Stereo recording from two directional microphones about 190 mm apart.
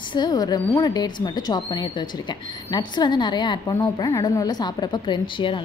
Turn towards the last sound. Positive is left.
turn(degrees=25)  # may be behind; listen again after turning